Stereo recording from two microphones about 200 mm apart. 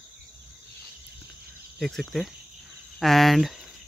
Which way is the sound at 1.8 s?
Centre (ahead or behind).